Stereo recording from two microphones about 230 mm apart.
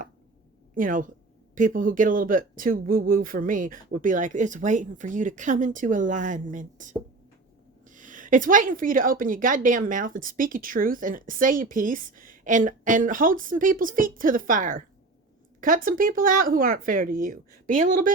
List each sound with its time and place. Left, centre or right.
0.8 s a woman's voice: right